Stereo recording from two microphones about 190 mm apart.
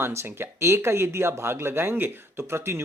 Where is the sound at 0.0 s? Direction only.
15° right (ahead or behind).